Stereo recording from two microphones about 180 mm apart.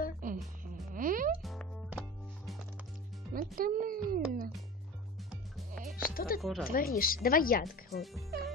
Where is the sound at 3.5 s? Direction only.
50° right (ahead or behind).